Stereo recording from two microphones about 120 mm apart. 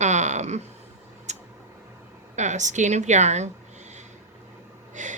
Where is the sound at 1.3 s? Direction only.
70° right (ahead or behind).